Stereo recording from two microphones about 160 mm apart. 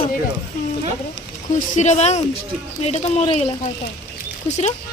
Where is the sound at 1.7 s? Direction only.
45° left (ahead or behind).